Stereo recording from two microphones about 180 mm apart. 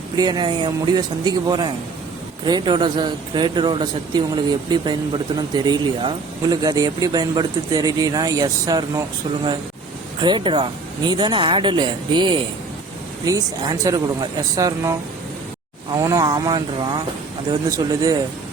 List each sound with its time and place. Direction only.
0.2 s speech: 25° right (ahead or behind)
16.0 s speech: 20° right (ahead or behind)